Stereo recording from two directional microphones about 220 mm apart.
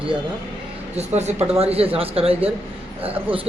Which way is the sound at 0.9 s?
30° right (ahead or behind).